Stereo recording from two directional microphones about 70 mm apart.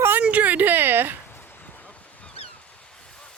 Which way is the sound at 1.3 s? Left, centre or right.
Left.